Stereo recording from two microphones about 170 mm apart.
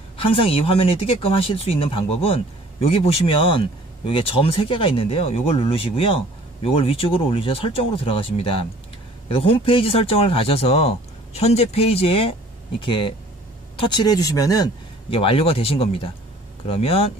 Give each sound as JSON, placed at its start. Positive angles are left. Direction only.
{"t": 0.2, "sound": "speech", "side_deg": 30}